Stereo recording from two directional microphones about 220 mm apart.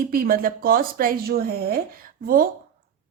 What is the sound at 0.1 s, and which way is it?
A woman's voice, 40° right (ahead or behind).